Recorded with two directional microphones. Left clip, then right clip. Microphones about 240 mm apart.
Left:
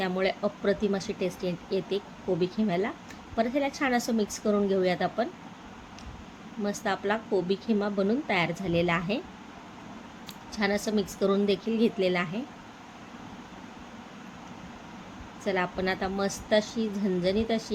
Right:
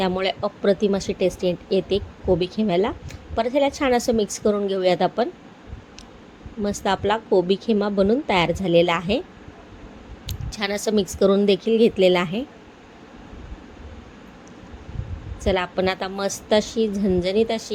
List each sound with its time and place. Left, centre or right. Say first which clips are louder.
0.0 s speech: right 5 dB; right
6.6 s speech: right 7 dB; right
10.2 s speech: right 3 dB; right
15.4 s speech: right 7 dB; right